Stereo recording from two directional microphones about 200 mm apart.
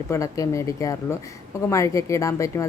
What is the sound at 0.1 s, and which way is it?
A woman's voice, 15° left (ahead or behind).